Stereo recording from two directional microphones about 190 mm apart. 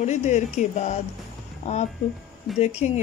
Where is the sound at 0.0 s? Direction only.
35° left (ahead or behind).